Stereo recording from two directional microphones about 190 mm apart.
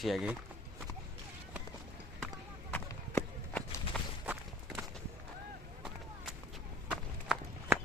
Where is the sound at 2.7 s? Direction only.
10° left (ahead or behind).